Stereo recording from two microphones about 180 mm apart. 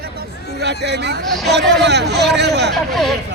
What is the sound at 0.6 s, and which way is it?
Speech, 70° right (ahead or behind).